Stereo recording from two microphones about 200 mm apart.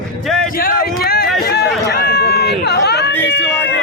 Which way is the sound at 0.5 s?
45° left (ahead or behind).